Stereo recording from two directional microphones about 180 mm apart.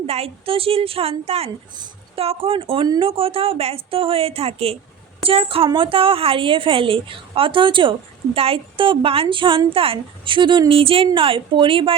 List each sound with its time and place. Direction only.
0.1 s a woman's voice: 35° right (ahead or behind)